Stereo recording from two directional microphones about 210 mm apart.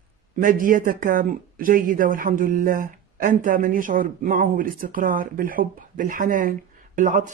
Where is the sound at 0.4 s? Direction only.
40° right (ahead or behind).